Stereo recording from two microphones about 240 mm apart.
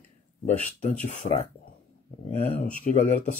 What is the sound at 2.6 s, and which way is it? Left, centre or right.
Speech, left.